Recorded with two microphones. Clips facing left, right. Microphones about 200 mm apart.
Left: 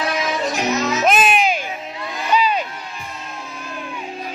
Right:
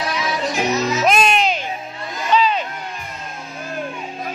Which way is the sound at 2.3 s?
10° left (ahead or behind).